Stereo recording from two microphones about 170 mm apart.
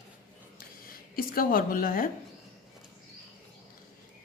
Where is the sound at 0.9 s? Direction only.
60° left (ahead or behind).